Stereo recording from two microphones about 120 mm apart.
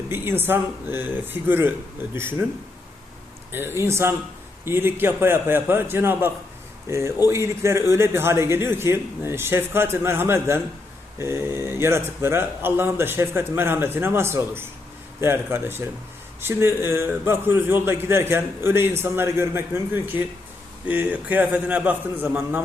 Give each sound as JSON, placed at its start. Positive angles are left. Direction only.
{"t": 0.1, "sound": "speech", "side_deg": -20}
{"t": 3.5, "sound": "a man's voice", "side_deg": -20}